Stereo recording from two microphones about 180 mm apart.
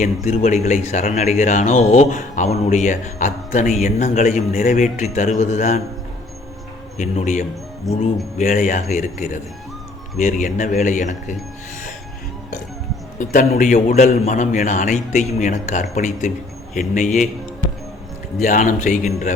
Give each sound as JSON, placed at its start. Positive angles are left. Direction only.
{"t": 0.0, "sound": "speech", "side_deg": 40}
{"t": 6.9, "sound": "a man's voice", "side_deg": 40}
{"t": 13.1, "sound": "a man's voice", "side_deg": 45}
{"t": 18.3, "sound": "a man's voice", "side_deg": 45}